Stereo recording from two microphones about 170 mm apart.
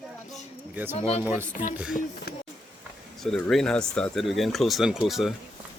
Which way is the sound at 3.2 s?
Centre (ahead or behind).